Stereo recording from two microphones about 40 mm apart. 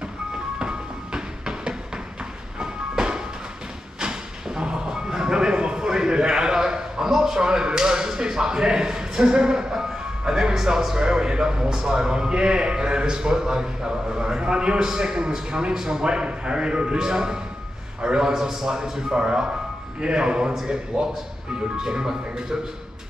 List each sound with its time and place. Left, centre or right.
0.6 s music: centre
4.0 s a sound: centre
11.0 s a man's voice: centre